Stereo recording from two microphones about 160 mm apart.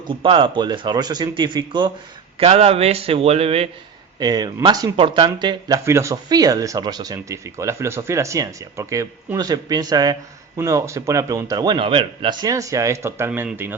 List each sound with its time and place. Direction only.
0.1 s speech: 35° right (ahead or behind)
2.4 s a man's voice: 40° right (ahead or behind)
4.2 s speech: 25° right (ahead or behind)